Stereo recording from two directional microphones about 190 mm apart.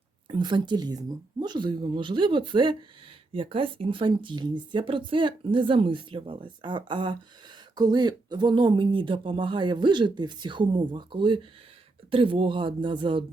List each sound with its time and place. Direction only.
0.3 s speech: 25° right (ahead or behind)